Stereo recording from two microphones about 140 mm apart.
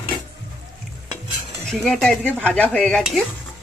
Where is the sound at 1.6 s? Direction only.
Centre (ahead or behind).